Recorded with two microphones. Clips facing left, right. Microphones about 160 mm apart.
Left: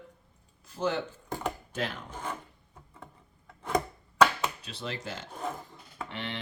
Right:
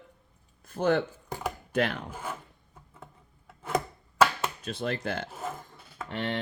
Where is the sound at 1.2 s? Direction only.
10° right (ahead or behind).